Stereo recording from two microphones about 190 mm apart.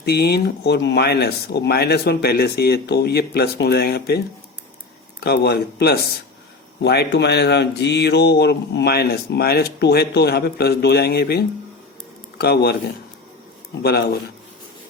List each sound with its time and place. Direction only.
0.0 s speech: 60° left (ahead or behind)
5.2 s speech: 60° left (ahead or behind)
13.8 s speech: 55° left (ahead or behind)